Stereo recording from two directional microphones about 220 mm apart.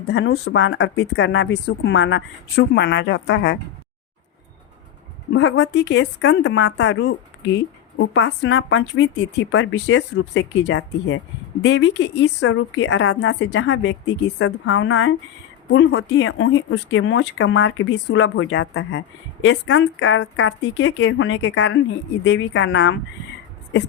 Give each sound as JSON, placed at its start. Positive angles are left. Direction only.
{"t": 0.1, "sound": "a woman's voice", "side_deg": 50}
{"t": 5.3, "sound": "a woman's voice", "side_deg": 60}
{"t": 20.8, "sound": "a woman's voice", "side_deg": 55}